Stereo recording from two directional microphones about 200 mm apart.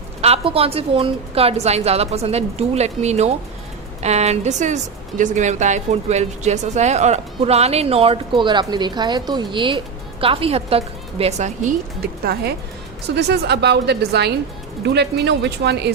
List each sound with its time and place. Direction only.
0.2 s speech: 30° right (ahead or behind)
12.2 s a woman's voice: 50° right (ahead or behind)